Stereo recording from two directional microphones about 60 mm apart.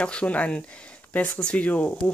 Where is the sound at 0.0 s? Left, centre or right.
Centre.